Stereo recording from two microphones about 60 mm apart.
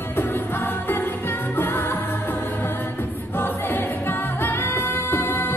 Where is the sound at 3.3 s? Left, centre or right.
Left.